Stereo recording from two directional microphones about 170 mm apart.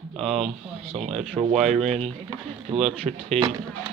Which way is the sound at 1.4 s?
10° right (ahead or behind).